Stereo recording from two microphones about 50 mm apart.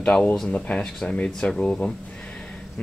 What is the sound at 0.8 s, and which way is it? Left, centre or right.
Speech, centre.